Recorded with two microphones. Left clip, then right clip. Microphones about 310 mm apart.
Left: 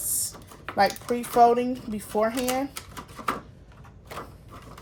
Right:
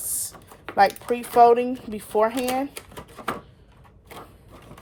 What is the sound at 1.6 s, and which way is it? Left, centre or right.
Speech, right.